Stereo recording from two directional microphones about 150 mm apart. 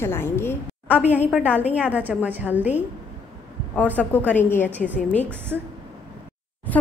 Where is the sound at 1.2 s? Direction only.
10° right (ahead or behind).